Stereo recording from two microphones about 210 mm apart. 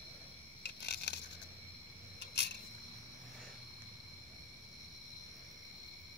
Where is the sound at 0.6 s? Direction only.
55° left (ahead or behind).